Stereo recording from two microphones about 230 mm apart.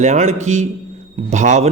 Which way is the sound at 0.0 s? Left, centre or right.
Right.